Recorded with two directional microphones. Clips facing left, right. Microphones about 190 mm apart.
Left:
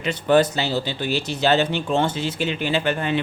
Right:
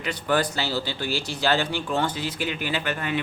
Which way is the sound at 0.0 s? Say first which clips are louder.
Left 7 dB; 25° left (ahead or behind).